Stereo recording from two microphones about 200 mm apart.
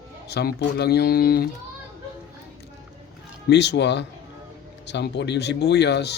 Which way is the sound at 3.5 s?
60° left (ahead or behind).